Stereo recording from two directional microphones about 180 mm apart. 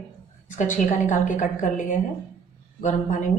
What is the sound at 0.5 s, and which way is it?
A woman's voice, 45° left (ahead or behind).